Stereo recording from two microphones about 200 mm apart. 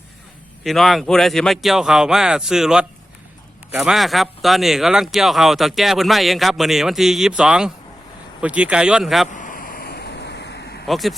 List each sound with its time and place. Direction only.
0.6 s speech: centre (ahead or behind)
9.3 s a sound: 40° left (ahead or behind); by 10.8 s 55° left (ahead or behind)
10.8 s speech: centre (ahead or behind)